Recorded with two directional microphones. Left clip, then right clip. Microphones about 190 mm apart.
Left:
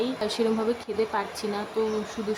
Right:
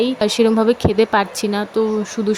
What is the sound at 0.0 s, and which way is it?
Speech, 35° right (ahead or behind).